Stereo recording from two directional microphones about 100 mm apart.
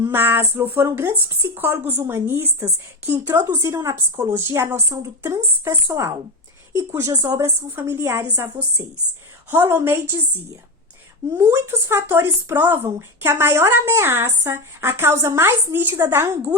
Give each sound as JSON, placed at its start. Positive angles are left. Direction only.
{"t": 0.0, "sound": "speech", "side_deg": -20}
{"t": 3.8, "sound": "speech", "side_deg": -25}
{"t": 9.5, "sound": "speech", "side_deg": -25}
{"t": 11.3, "sound": "speech", "side_deg": -30}